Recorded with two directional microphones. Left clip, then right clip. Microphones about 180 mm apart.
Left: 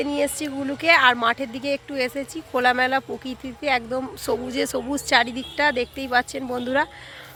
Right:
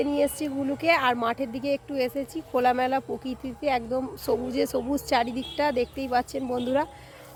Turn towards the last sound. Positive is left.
turn(degrees=-5)  # may be behind; listen again after turning